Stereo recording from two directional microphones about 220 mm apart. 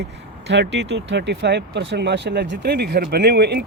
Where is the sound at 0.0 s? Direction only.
50° right (ahead or behind).